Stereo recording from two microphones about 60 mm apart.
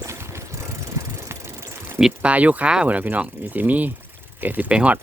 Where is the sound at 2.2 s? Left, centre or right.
Right.